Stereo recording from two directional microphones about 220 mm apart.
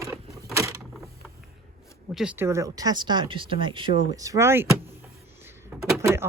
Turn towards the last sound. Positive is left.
turn(degrees=-10)  # may be behind; listen again after turning